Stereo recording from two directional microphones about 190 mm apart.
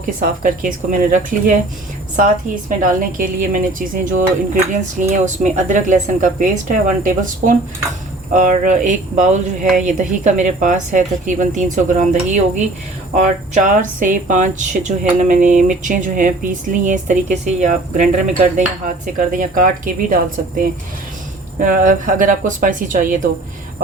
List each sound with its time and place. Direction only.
0.0 s speech: 45° right (ahead or behind)
2.6 s speech: 45° right (ahead or behind)
21.6 s speech: 45° right (ahead or behind)